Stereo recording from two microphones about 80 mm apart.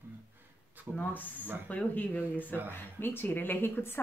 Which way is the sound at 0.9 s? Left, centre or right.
Left.